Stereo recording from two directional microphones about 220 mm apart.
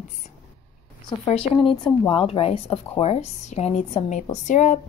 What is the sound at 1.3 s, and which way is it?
A woman's voice, 25° left (ahead or behind).